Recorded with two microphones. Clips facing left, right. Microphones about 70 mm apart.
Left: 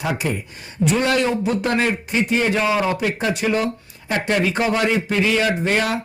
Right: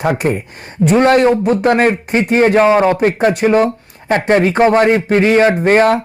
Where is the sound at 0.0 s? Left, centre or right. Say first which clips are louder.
Right 8 dB; right.